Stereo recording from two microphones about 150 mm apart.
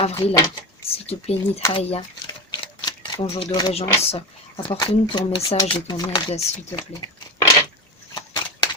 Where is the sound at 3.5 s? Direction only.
25° left (ahead or behind).